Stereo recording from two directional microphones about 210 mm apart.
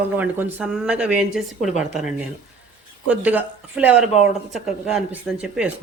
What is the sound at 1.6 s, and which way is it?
Speech, 35° left (ahead or behind).